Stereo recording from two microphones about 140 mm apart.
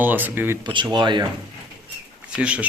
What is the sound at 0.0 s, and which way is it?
Speech, 15° right (ahead or behind).